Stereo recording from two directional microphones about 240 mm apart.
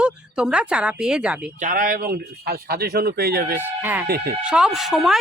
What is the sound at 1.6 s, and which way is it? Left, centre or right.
Speech, right.